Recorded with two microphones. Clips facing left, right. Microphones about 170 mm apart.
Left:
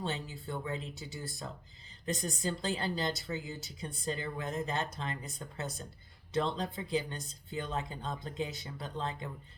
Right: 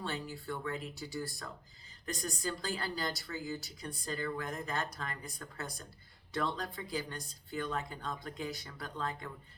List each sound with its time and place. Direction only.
0.0 s speech: 25° left (ahead or behind)